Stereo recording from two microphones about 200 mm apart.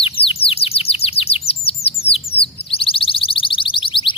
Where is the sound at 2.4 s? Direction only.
25° left (ahead or behind).